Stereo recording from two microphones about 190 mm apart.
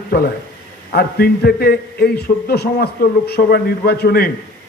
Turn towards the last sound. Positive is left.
turn(degrees=55)  # may be behind; listen again after turning